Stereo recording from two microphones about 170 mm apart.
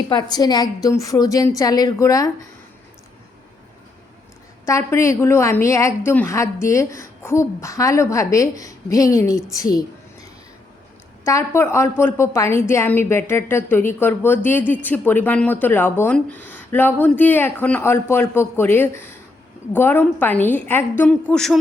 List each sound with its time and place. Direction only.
0.1 s a woman's voice: 25° left (ahead or behind)
4.6 s a woman's voice: 15° left (ahead or behind)
11.3 s a woman's voice: 15° left (ahead or behind)